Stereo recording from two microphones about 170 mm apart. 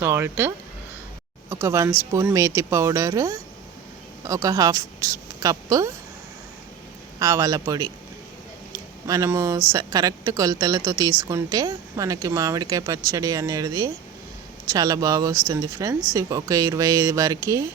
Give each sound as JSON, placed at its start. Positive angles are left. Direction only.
{"t": 0.0, "sound": "speech", "side_deg": -15}
{"t": 7.2, "sound": "speech", "side_deg": -20}